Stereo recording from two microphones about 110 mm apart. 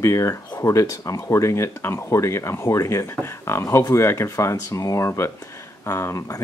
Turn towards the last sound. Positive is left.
turn(degrees=30)  # may be behind; listen again after turning